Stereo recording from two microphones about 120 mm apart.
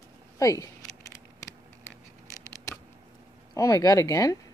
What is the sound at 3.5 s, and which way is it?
Speech, 30° left (ahead or behind).